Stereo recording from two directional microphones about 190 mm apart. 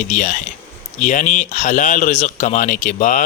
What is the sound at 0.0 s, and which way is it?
A man's voice, 40° left (ahead or behind).